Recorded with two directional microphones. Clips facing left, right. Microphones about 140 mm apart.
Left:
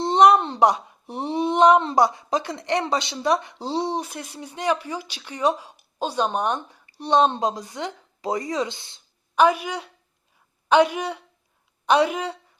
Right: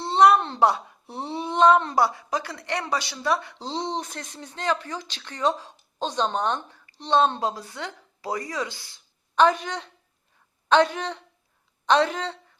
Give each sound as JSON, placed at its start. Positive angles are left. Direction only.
{"t": 0.0, "sound": "speech", "side_deg": 20}
{"t": 9.3, "sound": "speech", "side_deg": 10}